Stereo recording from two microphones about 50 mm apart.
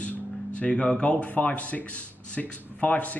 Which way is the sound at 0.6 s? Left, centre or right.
Left.